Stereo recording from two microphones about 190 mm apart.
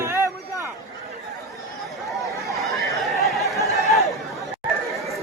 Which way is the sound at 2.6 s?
Centre (ahead or behind).